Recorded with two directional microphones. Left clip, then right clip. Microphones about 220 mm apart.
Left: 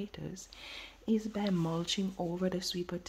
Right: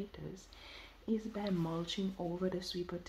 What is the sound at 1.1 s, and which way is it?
Speech, 40° left (ahead or behind).